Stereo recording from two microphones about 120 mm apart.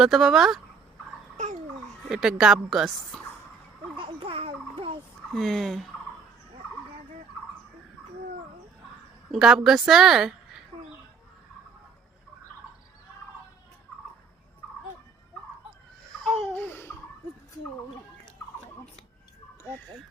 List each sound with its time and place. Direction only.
0.0 s a woman's voice: centre (ahead or behind)
2.0 s a woman's voice: 5° right (ahead or behind)
3.1 s a sound: 5° left (ahead or behind)
3.9 s babbling: 50° right (ahead or behind)
5.3 s a woman's voice: centre (ahead or behind)
9.3 s a woman's voice: 5° right (ahead or behind)
16.2 s laughter: centre (ahead or behind)
16.6 s a sound: 20° left (ahead or behind)